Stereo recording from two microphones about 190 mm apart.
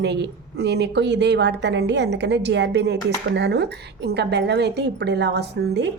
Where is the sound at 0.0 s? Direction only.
65° right (ahead or behind).